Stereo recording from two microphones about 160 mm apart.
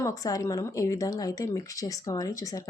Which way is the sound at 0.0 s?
20° left (ahead or behind).